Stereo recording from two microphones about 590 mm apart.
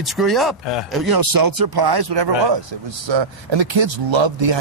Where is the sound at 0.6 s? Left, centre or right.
Left.